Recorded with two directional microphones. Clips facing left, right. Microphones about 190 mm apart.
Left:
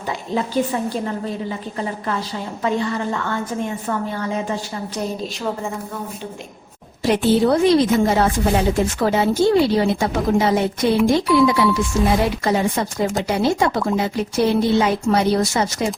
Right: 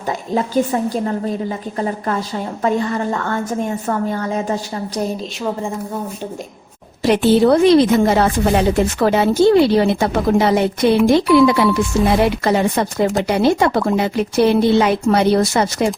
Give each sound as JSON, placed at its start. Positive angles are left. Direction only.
{"t": 0.3, "sound": "a woman's voice", "side_deg": -40}
{"t": 7.0, "sound": "speech", "side_deg": -70}